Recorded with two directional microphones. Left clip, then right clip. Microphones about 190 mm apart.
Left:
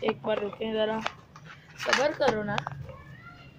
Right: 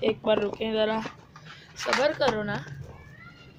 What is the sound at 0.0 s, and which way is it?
Speech, 45° right (ahead or behind).